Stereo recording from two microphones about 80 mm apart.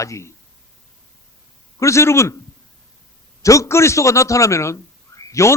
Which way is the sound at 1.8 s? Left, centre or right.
Left.